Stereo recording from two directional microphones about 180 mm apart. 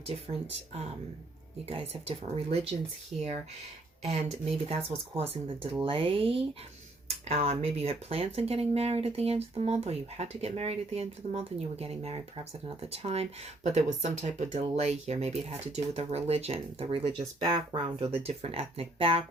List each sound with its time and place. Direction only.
0.0 s speech: 35° right (ahead or behind)
3.1 s speech: centre (ahead or behind)
4.0 s speech: 35° right (ahead or behind)